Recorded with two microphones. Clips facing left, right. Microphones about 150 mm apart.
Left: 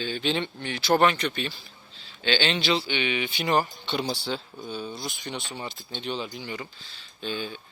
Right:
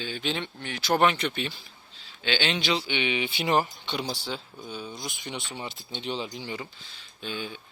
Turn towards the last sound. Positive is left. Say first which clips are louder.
# left 3 dB
turn(degrees=-10)  # may be behind; listen again after turning